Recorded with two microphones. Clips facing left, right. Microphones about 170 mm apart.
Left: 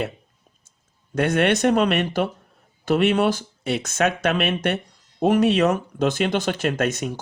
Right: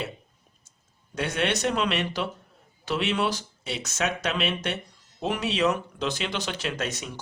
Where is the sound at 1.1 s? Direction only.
55° left (ahead or behind).